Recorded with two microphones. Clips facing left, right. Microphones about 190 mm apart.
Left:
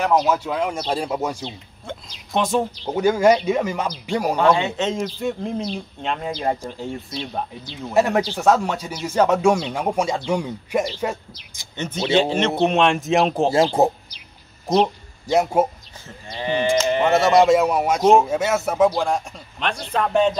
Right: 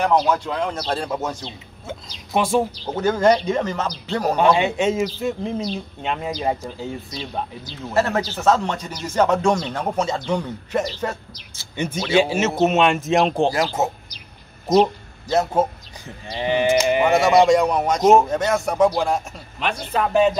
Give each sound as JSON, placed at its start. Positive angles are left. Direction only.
{"t": 0.0, "sound": "speech", "side_deg": 5}
{"t": 2.3, "sound": "speech", "side_deg": -10}
{"t": 2.9, "sound": "speech", "side_deg": 10}
{"t": 4.4, "sound": "speech", "side_deg": -15}
{"t": 7.9, "sound": "speech", "side_deg": 15}
{"t": 11.7, "sound": "speech", "side_deg": -10}
{"t": 13.5, "sound": "speech", "side_deg": 30}
{"t": 15.2, "sound": "speech", "side_deg": 10}
{"t": 16.3, "sound": "sheep", "side_deg": -15}
{"t": 17.1, "sound": "speech", "side_deg": 0}